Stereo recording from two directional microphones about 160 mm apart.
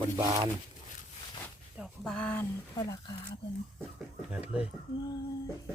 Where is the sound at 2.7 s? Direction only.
25° left (ahead or behind).